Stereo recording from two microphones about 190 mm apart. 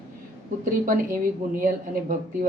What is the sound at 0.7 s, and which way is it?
Speech, 45° right (ahead or behind).